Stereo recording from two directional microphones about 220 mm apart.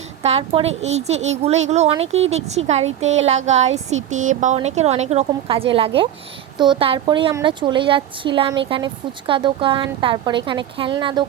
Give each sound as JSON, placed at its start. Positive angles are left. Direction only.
{"t": 0.2, "sound": "a woman's voice", "side_deg": -30}